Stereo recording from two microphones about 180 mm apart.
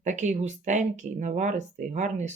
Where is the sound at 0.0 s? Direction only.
40° right (ahead or behind).